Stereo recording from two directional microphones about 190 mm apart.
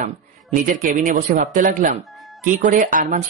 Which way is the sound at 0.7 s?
45° right (ahead or behind).